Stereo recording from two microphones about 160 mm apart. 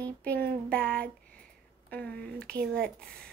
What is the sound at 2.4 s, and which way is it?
Speech, 70° right (ahead or behind).